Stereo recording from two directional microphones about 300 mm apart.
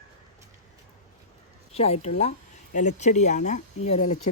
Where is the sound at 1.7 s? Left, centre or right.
Centre.